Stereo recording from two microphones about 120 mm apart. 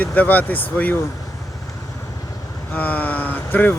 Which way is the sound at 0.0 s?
15° left (ahead or behind).